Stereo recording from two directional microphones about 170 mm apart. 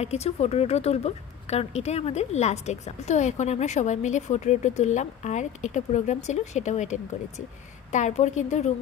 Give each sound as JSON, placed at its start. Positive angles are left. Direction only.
{"t": 0.0, "sound": "a woman's voice", "side_deg": 40}